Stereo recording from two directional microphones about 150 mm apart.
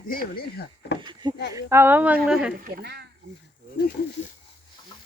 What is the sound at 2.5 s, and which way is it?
Speech, 75° right (ahead or behind).